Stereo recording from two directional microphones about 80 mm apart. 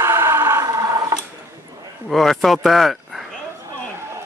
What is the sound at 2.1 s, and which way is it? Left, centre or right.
Speech, centre.